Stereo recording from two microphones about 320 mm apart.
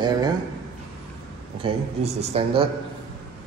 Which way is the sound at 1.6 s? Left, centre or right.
Centre.